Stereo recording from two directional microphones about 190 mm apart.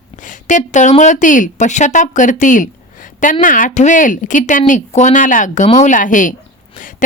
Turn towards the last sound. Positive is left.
turn(degrees=45)  # may be behind; listen again after turning